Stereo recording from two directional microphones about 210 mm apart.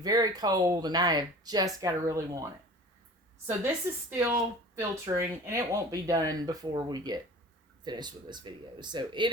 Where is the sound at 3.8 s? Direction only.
10° right (ahead or behind).